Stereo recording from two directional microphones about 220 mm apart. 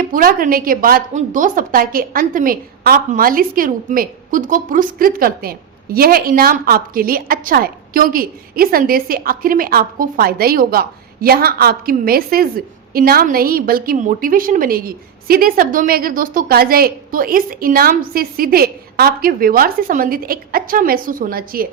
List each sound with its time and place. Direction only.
0.0 s a woman's voice: 40° right (ahead or behind)